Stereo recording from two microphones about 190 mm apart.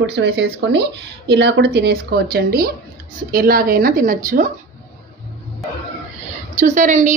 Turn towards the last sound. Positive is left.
turn(degrees=-40)  # may be behind; listen again after turning